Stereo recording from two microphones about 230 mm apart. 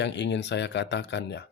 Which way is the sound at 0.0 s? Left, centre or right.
Left.